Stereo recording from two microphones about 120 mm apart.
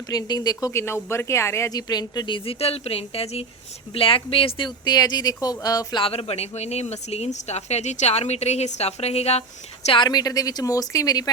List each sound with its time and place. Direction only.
0.1 s speech: 35° left (ahead or behind); by 9.4 s 60° left (ahead or behind)
10.0 s speech: 35° left (ahead or behind)